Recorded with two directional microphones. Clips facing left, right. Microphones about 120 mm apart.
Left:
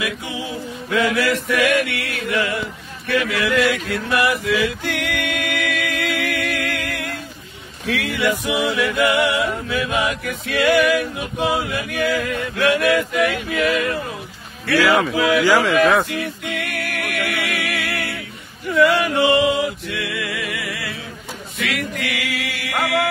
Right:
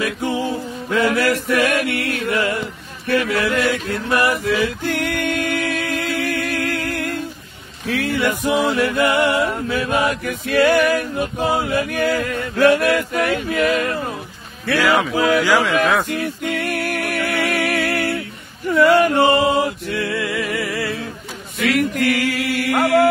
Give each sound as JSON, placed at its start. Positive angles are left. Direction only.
{"t": 0.0, "sound": "music", "side_deg": -50}
{"t": 3.1, "sound": "speech", "side_deg": -40}
{"t": 4.3, "sound": "music", "side_deg": -35}
{"t": 13.7, "sound": "speech", "side_deg": -40}
{"t": 15.1, "sound": "speech", "side_deg": -40}
{"t": 15.4, "sound": "a man's voice", "side_deg": 10}
{"t": 16.1, "sound": "music", "side_deg": -45}
{"t": 21.5, "sound": "mantra", "side_deg": -45}